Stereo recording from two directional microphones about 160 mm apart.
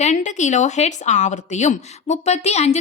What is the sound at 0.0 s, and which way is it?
A woman's voice, 45° left (ahead or behind).